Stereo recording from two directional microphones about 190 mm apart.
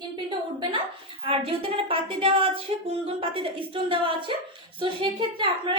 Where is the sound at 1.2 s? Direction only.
30° right (ahead or behind).